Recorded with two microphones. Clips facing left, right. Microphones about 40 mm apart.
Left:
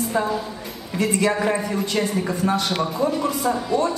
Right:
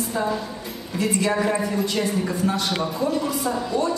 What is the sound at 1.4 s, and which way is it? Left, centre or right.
A woman's voice, centre.